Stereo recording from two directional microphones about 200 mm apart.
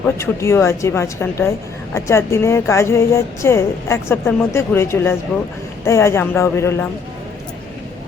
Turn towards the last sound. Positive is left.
turn(degrees=15)  # may be behind; listen again after turning